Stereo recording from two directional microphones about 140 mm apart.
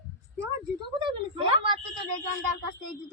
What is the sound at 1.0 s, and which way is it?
Speech, 35° right (ahead or behind).